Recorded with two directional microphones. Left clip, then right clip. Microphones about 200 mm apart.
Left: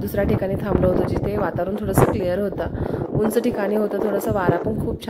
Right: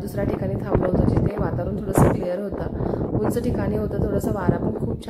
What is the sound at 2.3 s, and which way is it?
Speech, 30° left (ahead or behind).